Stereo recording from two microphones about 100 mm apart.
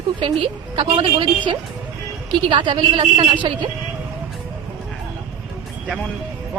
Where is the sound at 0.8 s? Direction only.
60° right (ahead or behind).